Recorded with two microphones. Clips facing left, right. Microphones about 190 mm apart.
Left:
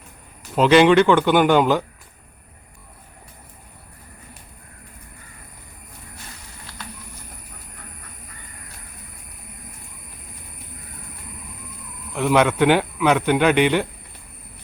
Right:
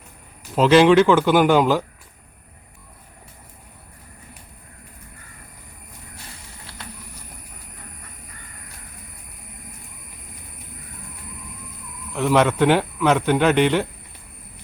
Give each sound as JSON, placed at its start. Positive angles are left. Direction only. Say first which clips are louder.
{"t": 0.5, "sound": "speech", "louder": "even", "side_deg": 0}
{"t": 6.7, "sound": "a sound", "louder": "left 2 dB", "side_deg": -30}
{"t": 12.1, "sound": "speech", "louder": "even", "side_deg": 0}